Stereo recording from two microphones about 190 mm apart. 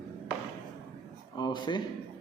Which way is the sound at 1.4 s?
25° left (ahead or behind).